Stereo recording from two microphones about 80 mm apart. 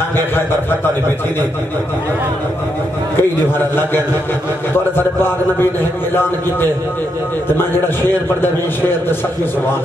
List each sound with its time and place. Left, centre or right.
3.2 s a man's voice: left